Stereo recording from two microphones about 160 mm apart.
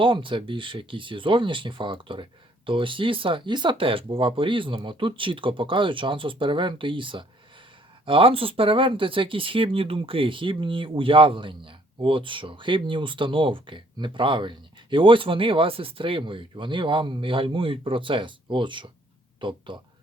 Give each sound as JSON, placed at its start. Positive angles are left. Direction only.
{"t": 0.0, "sound": "speech", "side_deg": -30}